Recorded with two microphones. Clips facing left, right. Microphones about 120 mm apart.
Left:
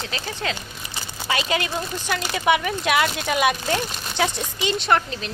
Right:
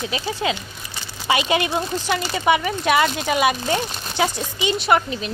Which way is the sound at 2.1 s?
Centre (ahead or behind).